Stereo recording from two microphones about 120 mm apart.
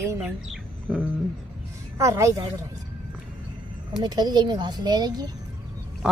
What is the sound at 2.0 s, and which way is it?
Speech, 25° right (ahead or behind).